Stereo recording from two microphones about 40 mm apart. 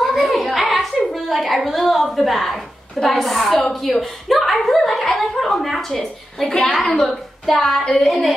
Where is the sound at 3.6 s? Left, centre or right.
Centre.